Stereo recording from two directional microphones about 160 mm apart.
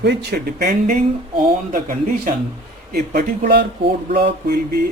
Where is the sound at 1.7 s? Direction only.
55° right (ahead or behind).